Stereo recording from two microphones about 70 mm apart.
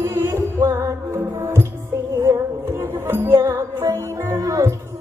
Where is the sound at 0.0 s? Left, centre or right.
Right.